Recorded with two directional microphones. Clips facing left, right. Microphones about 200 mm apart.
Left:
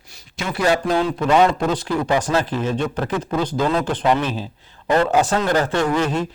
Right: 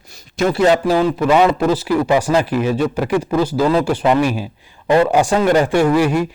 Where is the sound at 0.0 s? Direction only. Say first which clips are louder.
Right 11 dB; 45° right (ahead or behind).